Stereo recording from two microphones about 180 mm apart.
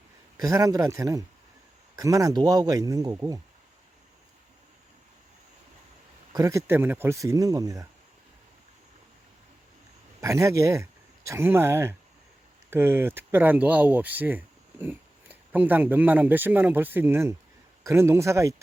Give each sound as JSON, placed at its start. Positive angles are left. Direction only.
{"t": 0.3, "sound": "speech", "side_deg": -20}
{"t": 6.3, "sound": "speech", "side_deg": -15}
{"t": 10.2, "sound": "speech", "side_deg": -15}